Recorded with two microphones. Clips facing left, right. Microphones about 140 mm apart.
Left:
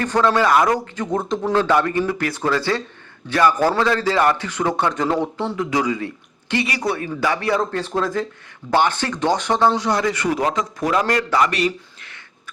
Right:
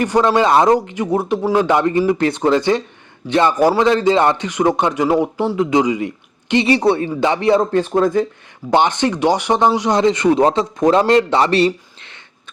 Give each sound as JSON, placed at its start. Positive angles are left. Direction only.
{"t": 0.0, "sound": "speech", "side_deg": -15}
{"t": 0.8, "sound": "speech", "side_deg": -15}